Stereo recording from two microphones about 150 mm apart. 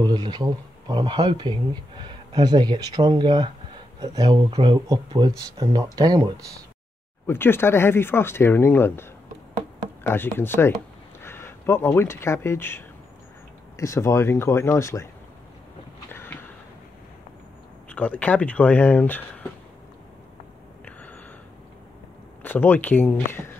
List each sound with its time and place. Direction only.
0.0 s speech: 30° right (ahead or behind)
7.2 s speech: 15° left (ahead or behind)
10.0 s speech: 15° left (ahead or behind)
16.1 s a sound: 15° left (ahead or behind)
17.9 s speech: 10° left (ahead or behind)
22.4 s speech: 15° left (ahead or behind)